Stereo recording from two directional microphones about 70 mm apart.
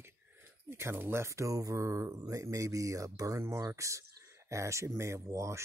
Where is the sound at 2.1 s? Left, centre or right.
Right.